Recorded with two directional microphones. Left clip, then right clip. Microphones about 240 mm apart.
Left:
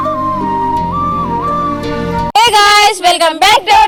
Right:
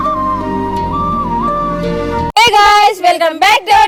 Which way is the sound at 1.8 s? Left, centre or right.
Centre.